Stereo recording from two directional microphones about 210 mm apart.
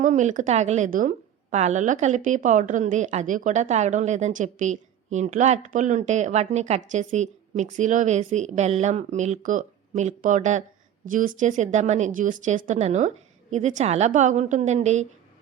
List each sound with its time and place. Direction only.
0.0 s a woman's voice: 35° right (ahead or behind)